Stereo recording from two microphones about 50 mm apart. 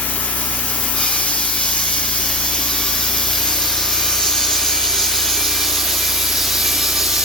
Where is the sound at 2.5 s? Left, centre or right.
Centre.